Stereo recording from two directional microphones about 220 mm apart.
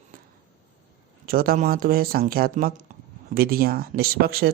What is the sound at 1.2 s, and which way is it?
Speech, 40° right (ahead or behind).